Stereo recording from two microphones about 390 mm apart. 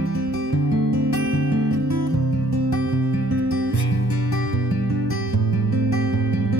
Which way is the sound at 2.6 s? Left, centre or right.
Right.